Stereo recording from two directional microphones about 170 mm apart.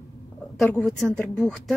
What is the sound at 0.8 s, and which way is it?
Speech, centre (ahead or behind).